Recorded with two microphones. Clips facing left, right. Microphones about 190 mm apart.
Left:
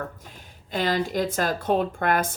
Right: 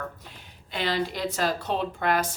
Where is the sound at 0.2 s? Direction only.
45° left (ahead or behind).